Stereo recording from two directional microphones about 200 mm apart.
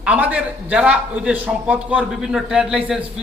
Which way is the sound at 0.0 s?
5° right (ahead or behind).